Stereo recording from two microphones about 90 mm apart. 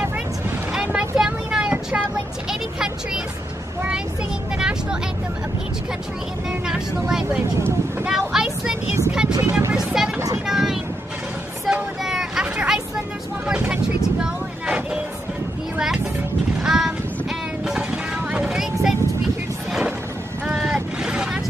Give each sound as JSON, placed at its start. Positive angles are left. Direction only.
{"t": 0.7, "sound": "vehicle", "side_deg": -10}
{"t": 4.6, "sound": "vehicle", "side_deg": -10}
{"t": 6.5, "sound": "speech", "side_deg": -10}
{"t": 8.0, "sound": "a sound", "side_deg": -5}
{"t": 9.4, "sound": "vehicle", "side_deg": -25}
{"t": 9.8, "sound": "vehicle", "side_deg": -5}
{"t": 16.6, "sound": "a sound", "side_deg": -5}
{"t": 17.6, "sound": "vehicle", "side_deg": -10}
{"t": 20.4, "sound": "boat", "side_deg": -5}